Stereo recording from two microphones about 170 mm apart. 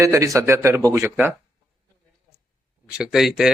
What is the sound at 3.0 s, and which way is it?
Speech, centre (ahead or behind).